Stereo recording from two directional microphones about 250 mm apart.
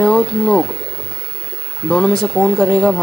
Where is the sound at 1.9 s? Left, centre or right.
Centre.